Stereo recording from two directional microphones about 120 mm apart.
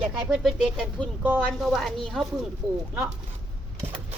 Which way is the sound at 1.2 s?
15° right (ahead or behind).